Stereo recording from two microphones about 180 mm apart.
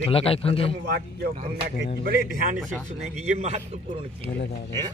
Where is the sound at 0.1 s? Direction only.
30° left (ahead or behind).